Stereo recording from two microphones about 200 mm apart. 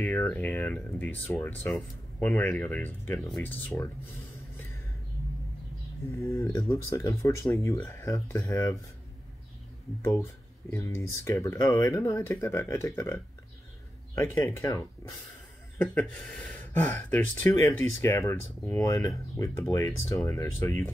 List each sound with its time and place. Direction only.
0.0 s speech: 10° left (ahead or behind)
6.1 s speech: 15° left (ahead or behind)
10.7 s speech: 15° left (ahead or behind)